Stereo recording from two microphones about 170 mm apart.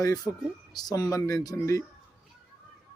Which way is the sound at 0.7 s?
25° left (ahead or behind).